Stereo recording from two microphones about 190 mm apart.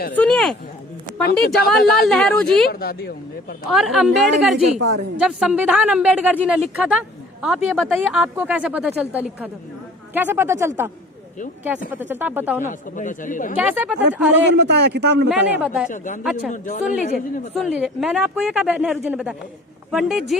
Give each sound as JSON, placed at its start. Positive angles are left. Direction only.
{"t": 0.1, "sound": "a woman's voice", "side_deg": 5}
{"t": 1.2, "sound": "a woman's voice", "side_deg": 55}
{"t": 2.0, "sound": "a woman's voice", "side_deg": 5}
{"t": 2.6, "sound": "speech", "side_deg": 55}
{"t": 3.7, "sound": "a woman's voice", "side_deg": 0}
{"t": 12.0, "sound": "speech", "side_deg": -10}
{"t": 12.6, "sound": "speech", "side_deg": 40}
{"t": 13.6, "sound": "speech", "side_deg": -10}
{"t": 14.5, "sound": "a man's voice", "side_deg": -60}
{"t": 15.3, "sound": "speech", "side_deg": -5}
{"t": 15.9, "sound": "speech", "side_deg": 45}
{"t": 16.2, "sound": "a woman's voice", "side_deg": -5}
{"t": 16.5, "sound": "a woman's voice", "side_deg": 40}
{"t": 17.7, "sound": "a woman's voice", "side_deg": -5}